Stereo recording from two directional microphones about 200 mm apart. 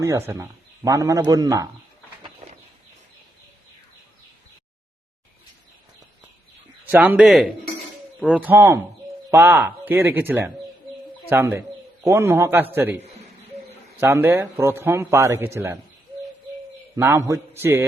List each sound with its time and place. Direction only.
0.0 s a man's voice: 15° right (ahead or behind)
6.8 s a man's voice: 10° right (ahead or behind)
14.0 s a man's voice: 10° right (ahead or behind)
17.0 s a man's voice: 15° right (ahead or behind)